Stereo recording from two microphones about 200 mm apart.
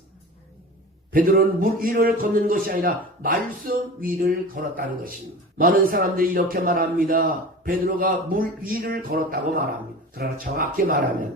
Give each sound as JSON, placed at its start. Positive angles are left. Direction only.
{"t": 1.1, "sound": "a man's voice", "side_deg": -45}